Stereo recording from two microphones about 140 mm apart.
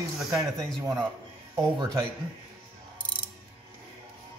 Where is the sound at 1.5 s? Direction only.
25° right (ahead or behind).